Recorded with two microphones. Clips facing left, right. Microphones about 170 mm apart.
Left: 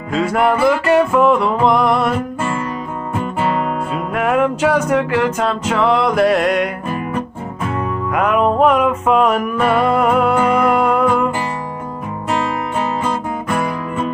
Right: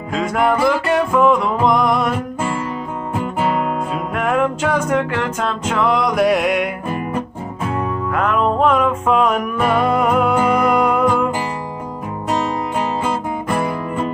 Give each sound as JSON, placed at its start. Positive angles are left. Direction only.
{"t": 0.1, "sound": "music", "side_deg": 5}
{"t": 4.1, "sound": "music", "side_deg": 5}
{"t": 8.1, "sound": "music", "side_deg": 10}
{"t": 12.3, "sound": "music", "side_deg": -10}
{"t": 13.5, "sound": "music", "side_deg": -30}